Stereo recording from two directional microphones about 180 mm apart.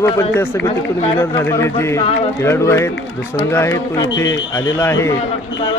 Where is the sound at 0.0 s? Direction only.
15° left (ahead or behind).